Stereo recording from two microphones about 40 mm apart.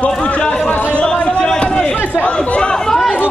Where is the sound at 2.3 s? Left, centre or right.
Left.